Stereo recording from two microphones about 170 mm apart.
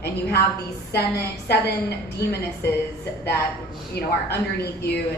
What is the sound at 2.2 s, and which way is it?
Speech, 75° left (ahead or behind).